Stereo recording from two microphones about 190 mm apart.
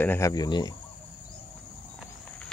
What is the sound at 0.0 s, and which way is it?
Speech, 15° left (ahead or behind).